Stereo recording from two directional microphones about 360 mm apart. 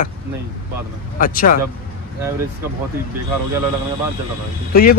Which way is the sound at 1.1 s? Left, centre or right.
Left.